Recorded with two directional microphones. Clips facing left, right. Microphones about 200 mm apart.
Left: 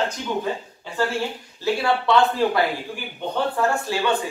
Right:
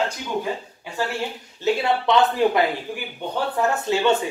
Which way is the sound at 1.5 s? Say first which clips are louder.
Right 1 dB; 20° right (ahead or behind).